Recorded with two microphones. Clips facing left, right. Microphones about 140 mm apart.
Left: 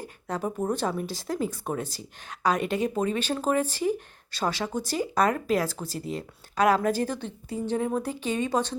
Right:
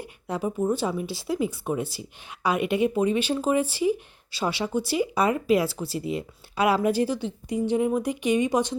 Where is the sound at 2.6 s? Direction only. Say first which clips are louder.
Right 4 dB; 40° left (ahead or behind).